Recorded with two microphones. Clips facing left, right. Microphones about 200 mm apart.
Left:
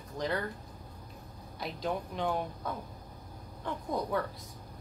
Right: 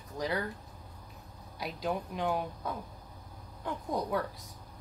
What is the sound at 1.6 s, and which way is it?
Speech, 5° right (ahead or behind).